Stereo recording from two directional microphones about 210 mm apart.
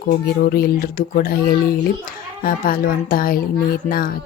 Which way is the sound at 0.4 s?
45° left (ahead or behind).